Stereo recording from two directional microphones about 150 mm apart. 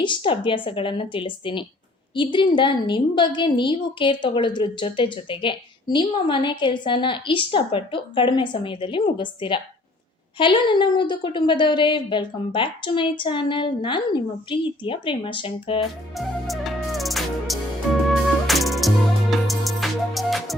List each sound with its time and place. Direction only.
0.0 s a woman's voice: 35° left (ahead or behind)
16.1 s music: centre (ahead or behind)